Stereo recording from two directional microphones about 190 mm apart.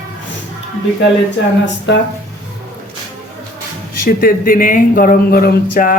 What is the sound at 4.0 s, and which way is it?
Speech, 50° left (ahead or behind).